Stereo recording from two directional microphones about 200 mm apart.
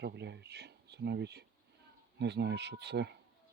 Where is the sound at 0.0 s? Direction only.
60° right (ahead or behind).